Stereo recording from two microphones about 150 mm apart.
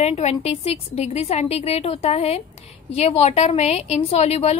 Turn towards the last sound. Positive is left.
turn(degrees=45)  # may be behind; listen again after turning